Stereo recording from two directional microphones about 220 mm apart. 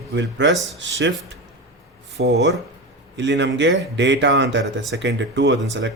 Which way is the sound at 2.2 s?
50° right (ahead or behind).